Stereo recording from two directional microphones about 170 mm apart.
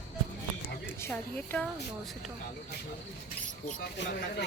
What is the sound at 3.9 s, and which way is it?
Speech, 90° left.